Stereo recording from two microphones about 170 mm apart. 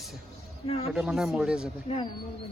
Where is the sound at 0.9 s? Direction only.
5° right (ahead or behind).